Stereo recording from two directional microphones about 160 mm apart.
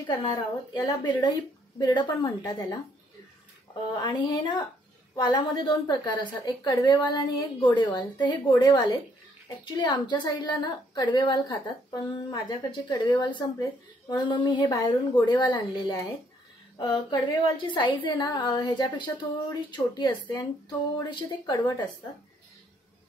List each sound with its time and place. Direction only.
0.1 s a woman's voice: 30° left (ahead or behind)
3.9 s a woman's voice: 30° left (ahead or behind)